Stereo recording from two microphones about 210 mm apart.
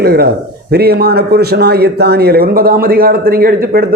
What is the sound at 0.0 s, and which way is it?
Speech, 50° right (ahead or behind).